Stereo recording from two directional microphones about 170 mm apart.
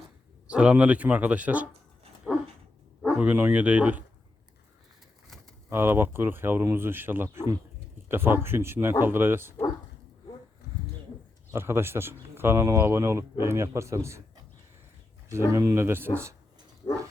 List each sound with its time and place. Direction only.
0.4 s speech: 5° right (ahead or behind)
2.3 s a sound: 10° right (ahead or behind)
3.2 s speech: 10° right (ahead or behind)
5.7 s speech: 15° right (ahead or behind)
11.5 s speech: 15° right (ahead or behind)